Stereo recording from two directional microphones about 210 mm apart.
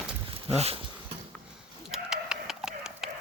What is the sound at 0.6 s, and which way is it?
Speech, 30° right (ahead or behind).